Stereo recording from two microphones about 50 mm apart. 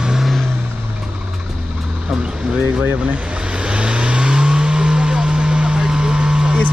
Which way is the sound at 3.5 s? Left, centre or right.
Right.